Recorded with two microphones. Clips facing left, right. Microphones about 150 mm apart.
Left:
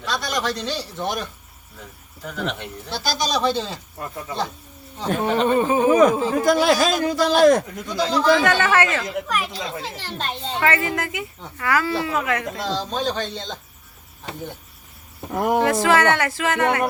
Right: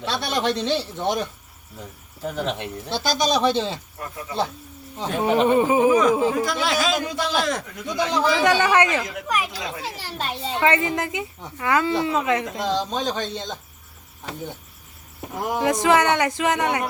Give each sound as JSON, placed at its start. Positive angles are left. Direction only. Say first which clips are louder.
{"t": 0.0, "sound": "speech", "louder": "right 1 dB", "side_deg": -25}
{"t": 4.9, "sound": "speech", "louder": "right 1 dB", "side_deg": -15}
{"t": 5.9, "sound": "speech", "louder": "left 2 dB", "side_deg": 55}
{"t": 8.1, "sound": "speech", "louder": "left 2 dB", "side_deg": -15}
{"t": 15.3, "sound": "speech", "louder": "left 6 dB", "side_deg": 60}
{"t": 15.6, "sound": "speech", "louder": "right 2 dB", "side_deg": -15}